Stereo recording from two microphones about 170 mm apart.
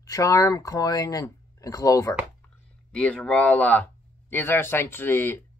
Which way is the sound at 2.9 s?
5° left (ahead or behind).